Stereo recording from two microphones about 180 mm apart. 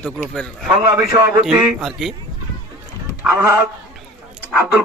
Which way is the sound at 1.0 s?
15° right (ahead or behind).